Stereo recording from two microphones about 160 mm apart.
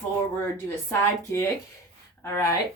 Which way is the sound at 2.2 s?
20° left (ahead or behind).